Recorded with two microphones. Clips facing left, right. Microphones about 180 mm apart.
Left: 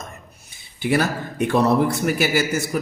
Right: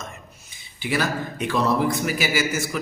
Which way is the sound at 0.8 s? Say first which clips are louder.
Left 4 dB; 55° left (ahead or behind).